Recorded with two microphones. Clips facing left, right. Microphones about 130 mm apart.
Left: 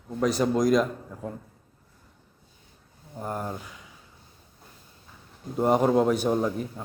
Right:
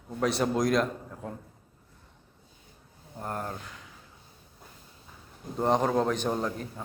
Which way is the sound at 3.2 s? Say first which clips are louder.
Left 3 dB; 5° left (ahead or behind).